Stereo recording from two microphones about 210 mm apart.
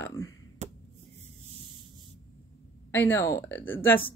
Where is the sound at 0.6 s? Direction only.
35° right (ahead or behind).